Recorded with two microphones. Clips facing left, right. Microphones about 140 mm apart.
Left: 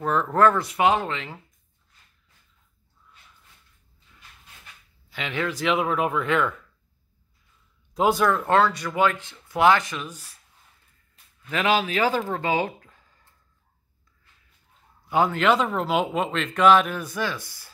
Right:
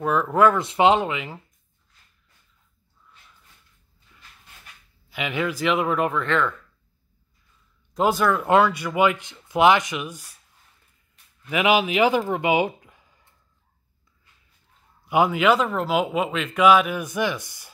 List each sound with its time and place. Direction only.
0.0 s speech: 5° right (ahead or behind)
0.6 s speech: 25° right (ahead or behind)
1.1 s speech: 10° right (ahead or behind)
5.1 s speech: 5° right (ahead or behind); by 6.5 s 10° left (ahead or behind)
7.9 s speech: centre (ahead or behind)
8.5 s speech: 15° right (ahead or behind)
11.4 s speech: 10° right (ahead or behind)
15.0 s speech: 10° right (ahead or behind)